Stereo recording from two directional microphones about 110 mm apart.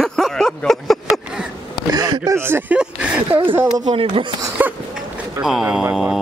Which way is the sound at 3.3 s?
45° right (ahead or behind).